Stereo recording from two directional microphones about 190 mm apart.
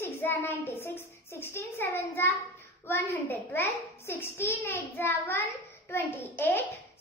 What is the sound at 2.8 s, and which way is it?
A child's voice, 10° left (ahead or behind).